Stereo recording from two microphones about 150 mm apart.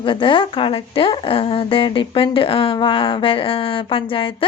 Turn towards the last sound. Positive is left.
turn(degrees=35)  # may be behind; listen again after turning